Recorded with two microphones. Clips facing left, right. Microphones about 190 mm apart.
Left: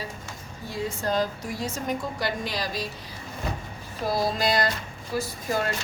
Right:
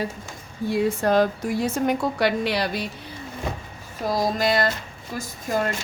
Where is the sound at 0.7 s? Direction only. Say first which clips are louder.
Right 7 dB; 60° right (ahead or behind).